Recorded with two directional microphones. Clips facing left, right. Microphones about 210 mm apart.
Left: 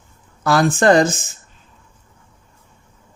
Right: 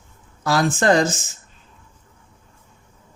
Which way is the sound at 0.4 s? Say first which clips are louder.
Left 4 dB; 55° left (ahead or behind).